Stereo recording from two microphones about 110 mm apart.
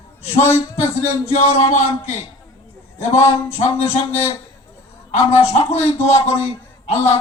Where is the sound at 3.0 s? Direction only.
75° left (ahead or behind).